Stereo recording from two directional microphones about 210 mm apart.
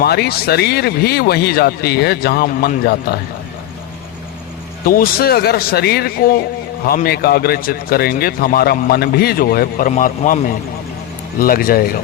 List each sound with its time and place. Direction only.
0.0 s a man's voice: 50° left (ahead or behind)
4.9 s a man's voice: 45° left (ahead or behind)